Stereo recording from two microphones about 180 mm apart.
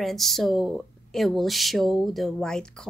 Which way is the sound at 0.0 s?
Centre (ahead or behind).